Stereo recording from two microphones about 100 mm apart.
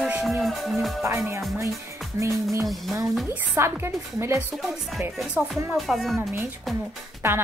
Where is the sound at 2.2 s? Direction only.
30° right (ahead or behind).